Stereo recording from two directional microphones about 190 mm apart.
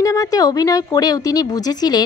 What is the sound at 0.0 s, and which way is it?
Speech, 15° left (ahead or behind).